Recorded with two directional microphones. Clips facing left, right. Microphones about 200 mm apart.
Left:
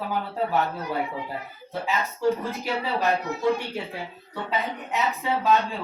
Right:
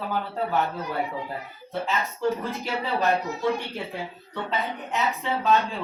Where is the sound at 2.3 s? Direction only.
Centre (ahead or behind).